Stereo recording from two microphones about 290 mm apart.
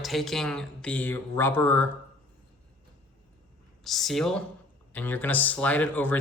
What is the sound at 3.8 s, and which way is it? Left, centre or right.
A man's voice, centre.